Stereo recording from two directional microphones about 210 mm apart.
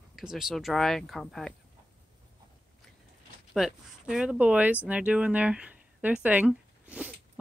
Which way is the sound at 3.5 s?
Centre (ahead or behind).